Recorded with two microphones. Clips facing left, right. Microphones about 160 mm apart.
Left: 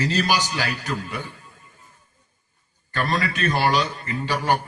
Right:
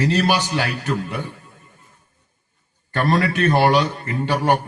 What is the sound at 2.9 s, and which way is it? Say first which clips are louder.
A man's voice: right 5 dB; 60° right (ahead or behind).